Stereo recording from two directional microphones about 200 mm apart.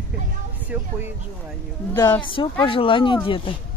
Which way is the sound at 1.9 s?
20° left (ahead or behind).